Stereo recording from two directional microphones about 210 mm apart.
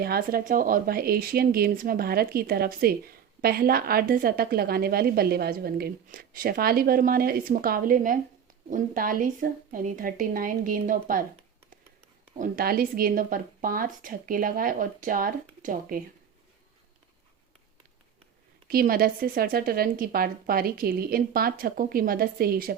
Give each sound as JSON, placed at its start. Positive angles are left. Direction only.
{"t": 0.0, "sound": "speech", "side_deg": -45}
{"t": 12.4, "sound": "speech", "side_deg": -45}
{"t": 18.7, "sound": "speech", "side_deg": -45}